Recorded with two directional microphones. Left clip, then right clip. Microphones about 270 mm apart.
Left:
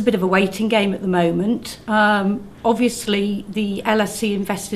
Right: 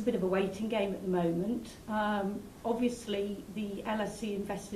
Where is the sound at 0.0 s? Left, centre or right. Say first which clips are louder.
Left 13 dB; centre.